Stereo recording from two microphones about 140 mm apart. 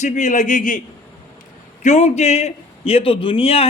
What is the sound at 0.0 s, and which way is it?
Speech, 60° left (ahead or behind).